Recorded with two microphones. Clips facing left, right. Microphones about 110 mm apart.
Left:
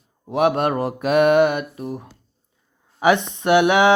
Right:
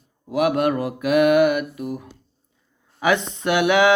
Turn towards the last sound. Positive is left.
turn(degrees=20)  # may be behind; listen again after turning